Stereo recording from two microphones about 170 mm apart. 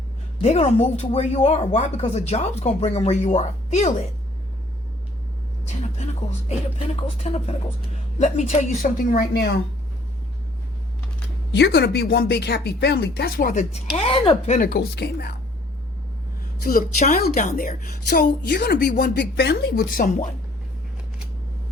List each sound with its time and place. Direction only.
0.4 s speech: 40° left (ahead or behind)
5.6 s a woman's voice: 45° left (ahead or behind); by 9.6 s 65° left (ahead or behind)
11.5 s speech: 80° left; by 13.7 s 55° left (ahead or behind)
13.9 s speech: 30° left (ahead or behind)
14.7 s speech: 75° left (ahead or behind)
16.6 s a woman's voice: 50° left (ahead or behind)